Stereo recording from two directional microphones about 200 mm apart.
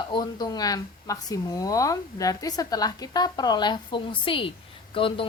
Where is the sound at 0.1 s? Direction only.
20° left (ahead or behind).